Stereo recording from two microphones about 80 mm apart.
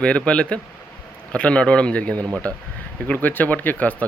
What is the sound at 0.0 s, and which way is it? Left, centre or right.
Speech, centre.